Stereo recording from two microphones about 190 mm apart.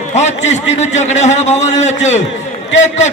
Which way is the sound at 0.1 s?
35° left (ahead or behind).